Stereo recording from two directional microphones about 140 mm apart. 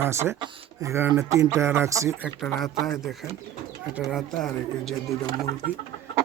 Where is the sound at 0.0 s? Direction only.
20° right (ahead or behind).